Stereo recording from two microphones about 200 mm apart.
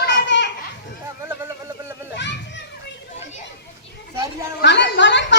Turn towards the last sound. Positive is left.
turn(degrees=65)  # may be behind; listen again after turning